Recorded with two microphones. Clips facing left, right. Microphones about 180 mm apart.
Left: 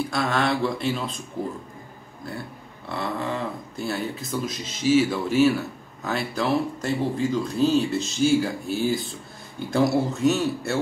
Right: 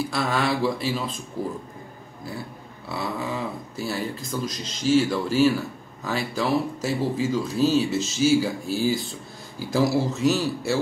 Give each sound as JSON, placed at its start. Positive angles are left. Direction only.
{"t": 0.0, "sound": "speech", "side_deg": 0}
{"t": 2.9, "sound": "speech", "side_deg": -5}